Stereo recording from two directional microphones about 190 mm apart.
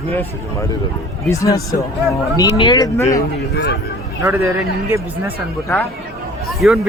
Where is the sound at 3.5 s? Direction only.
65° left (ahead or behind).